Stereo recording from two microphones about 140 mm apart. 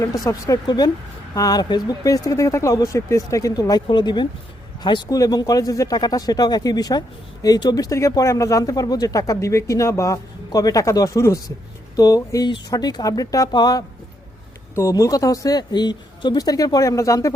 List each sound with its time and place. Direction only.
0.0 s speech: 25° left (ahead or behind)